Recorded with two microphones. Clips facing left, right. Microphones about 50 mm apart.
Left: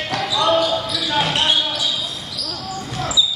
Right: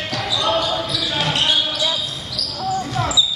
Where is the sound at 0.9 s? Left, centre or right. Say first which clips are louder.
Left 3 dB; centre.